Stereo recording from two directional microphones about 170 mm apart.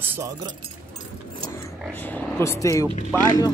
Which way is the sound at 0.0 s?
15° right (ahead or behind).